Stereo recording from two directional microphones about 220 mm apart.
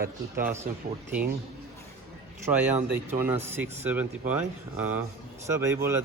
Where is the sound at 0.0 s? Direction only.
40° right (ahead or behind).